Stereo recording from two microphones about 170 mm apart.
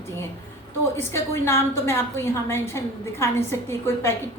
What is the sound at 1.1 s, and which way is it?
A woman's voice, 15° left (ahead or behind).